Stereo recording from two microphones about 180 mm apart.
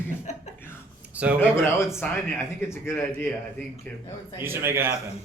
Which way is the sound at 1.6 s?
15° left (ahead or behind).